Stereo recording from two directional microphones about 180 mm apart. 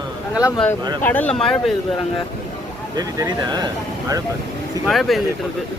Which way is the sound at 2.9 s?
20° right (ahead or behind).